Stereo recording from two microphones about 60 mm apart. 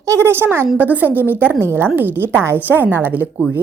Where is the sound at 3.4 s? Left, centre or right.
Right.